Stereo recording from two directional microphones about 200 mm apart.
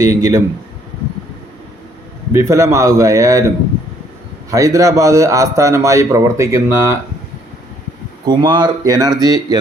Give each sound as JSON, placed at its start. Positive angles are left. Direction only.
{"t": 0.0, "sound": "a man's voice", "side_deg": -15}
{"t": 2.3, "sound": "a man's voice", "side_deg": -15}
{"t": 4.5, "sound": "a man's voice", "side_deg": -15}
{"t": 8.2, "sound": "speech", "side_deg": -20}